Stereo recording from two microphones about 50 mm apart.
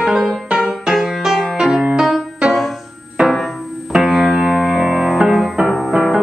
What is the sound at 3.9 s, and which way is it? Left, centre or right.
Music, centre.